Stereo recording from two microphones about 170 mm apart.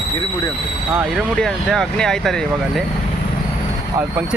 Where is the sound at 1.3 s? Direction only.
5° left (ahead or behind).